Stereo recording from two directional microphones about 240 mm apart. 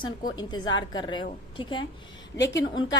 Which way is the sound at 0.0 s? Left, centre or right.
Centre.